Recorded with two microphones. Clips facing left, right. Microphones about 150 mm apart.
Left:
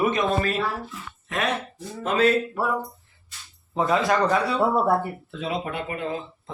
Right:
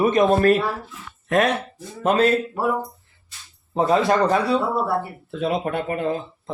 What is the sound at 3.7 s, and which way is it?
Speech, 30° right (ahead or behind).